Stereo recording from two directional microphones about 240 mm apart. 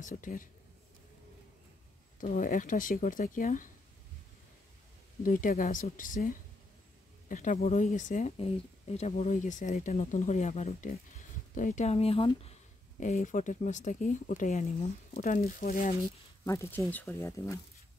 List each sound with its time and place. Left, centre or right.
0.0 s speech: left
2.1 s speech: left
5.2 s speech: left
16.4 s speech: centre